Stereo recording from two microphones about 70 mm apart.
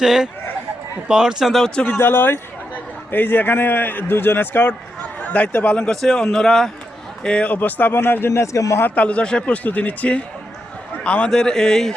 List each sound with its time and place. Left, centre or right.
0.0 s speech: centre
2.0 s a man's voice: left
5.9 s a man's voice: centre; by 8.3 s left
8.3 s a man's voice: left
8.8 s a man's voice: centre